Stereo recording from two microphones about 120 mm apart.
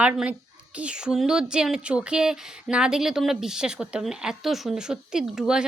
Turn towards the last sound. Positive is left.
turn(degrees=-5)  # may be behind; listen again after turning